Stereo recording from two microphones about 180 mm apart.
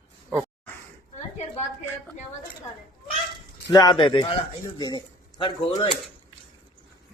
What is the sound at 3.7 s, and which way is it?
A man's voice, 25° left (ahead or behind).